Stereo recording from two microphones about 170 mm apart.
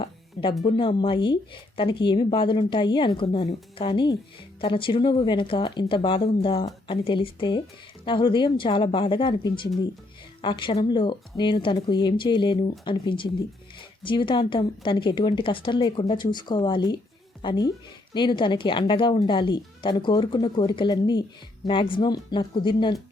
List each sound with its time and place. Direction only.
0.6 s a woman's voice: 30° left (ahead or behind)